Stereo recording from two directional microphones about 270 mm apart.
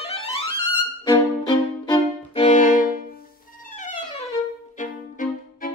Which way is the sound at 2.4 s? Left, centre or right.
Left.